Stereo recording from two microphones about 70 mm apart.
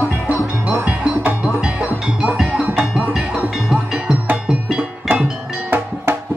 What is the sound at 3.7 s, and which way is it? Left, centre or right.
Music, centre.